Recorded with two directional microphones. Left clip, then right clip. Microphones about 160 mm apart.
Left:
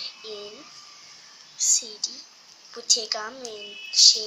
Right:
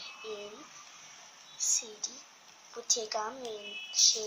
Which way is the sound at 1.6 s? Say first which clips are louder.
Left 8 dB; 10° right (ahead or behind).